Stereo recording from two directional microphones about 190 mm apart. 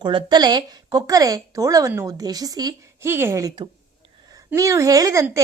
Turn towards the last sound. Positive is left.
turn(degrees=-15)  # may be behind; listen again after turning